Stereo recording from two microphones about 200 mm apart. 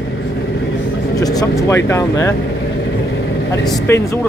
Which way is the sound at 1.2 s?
20° left (ahead or behind).